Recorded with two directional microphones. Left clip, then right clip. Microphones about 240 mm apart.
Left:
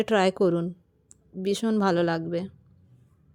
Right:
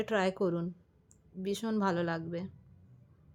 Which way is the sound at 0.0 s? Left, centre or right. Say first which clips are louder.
Left 9 dB; left.